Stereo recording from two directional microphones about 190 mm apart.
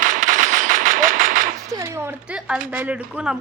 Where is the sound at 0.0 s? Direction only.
45° right (ahead or behind).